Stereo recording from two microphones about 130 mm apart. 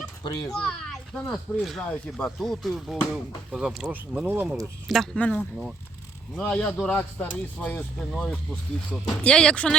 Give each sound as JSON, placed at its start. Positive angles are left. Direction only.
{"t": 0.2, "sound": "a child's voice", "side_deg": 30}
{"t": 0.5, "sound": "speech", "side_deg": 5}
{"t": 4.9, "sound": "speech", "side_deg": 0}
{"t": 6.4, "sound": "speech", "side_deg": 10}